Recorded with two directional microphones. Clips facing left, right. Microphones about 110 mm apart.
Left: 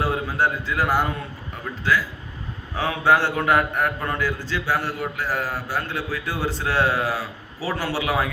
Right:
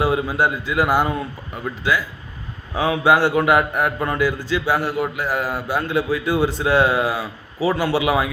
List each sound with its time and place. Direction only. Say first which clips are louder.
0.0 s a man's voice: right 4 dB; 15° right (ahead or behind)